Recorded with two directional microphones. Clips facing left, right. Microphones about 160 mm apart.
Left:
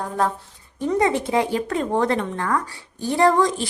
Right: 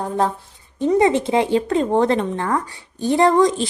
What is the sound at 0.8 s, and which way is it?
Speech, 20° right (ahead or behind).